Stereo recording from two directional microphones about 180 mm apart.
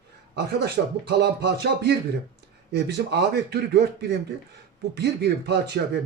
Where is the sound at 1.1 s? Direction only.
65° right (ahead or behind).